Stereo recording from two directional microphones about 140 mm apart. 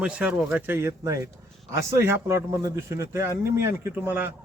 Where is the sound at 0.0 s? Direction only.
10° right (ahead or behind).